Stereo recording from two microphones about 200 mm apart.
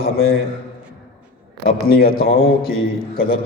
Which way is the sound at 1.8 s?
50° left (ahead or behind).